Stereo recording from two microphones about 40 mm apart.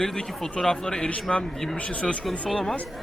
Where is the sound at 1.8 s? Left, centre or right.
Left.